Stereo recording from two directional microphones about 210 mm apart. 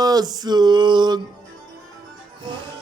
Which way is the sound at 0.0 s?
20° right (ahead or behind).